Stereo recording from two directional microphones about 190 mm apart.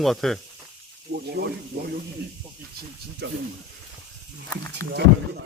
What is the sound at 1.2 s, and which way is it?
Speech, 60° right (ahead or behind).